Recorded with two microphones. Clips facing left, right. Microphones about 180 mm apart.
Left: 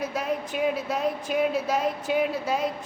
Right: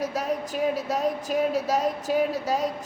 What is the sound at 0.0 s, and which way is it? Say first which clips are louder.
A man's voice: right 1 dB; 40° right (ahead or behind).